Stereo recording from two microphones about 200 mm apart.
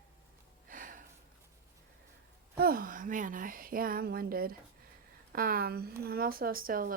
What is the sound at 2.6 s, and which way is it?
Speech, 45° right (ahead or behind).